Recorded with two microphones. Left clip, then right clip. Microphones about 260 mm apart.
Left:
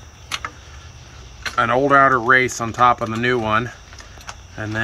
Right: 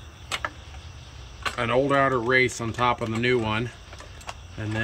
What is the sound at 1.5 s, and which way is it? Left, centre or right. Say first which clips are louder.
Speech: left 8 dB; centre.